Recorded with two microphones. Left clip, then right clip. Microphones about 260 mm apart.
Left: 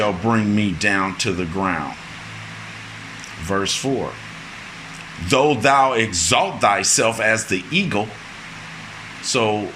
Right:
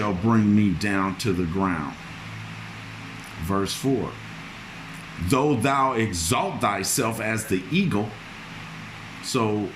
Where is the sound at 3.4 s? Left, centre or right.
Centre.